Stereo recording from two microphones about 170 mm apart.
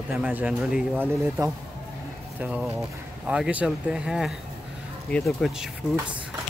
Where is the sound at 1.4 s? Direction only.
20° right (ahead or behind).